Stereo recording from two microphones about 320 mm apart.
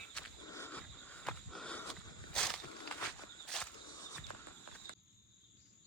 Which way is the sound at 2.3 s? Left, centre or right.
Centre.